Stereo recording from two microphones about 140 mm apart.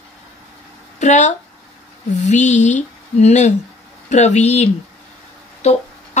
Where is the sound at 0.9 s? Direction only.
60° left (ahead or behind).